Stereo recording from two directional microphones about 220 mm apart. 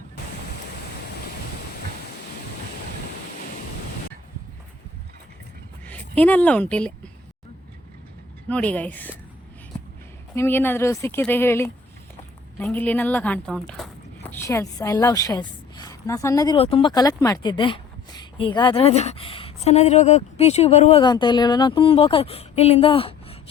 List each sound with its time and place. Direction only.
5.9 s a woman's voice: 5° left (ahead or behind)
8.4 s a woman's voice: 5° left (ahead or behind)
10.3 s a woman's voice: 10° left (ahead or behind); by 23.4 s 25° left (ahead or behind)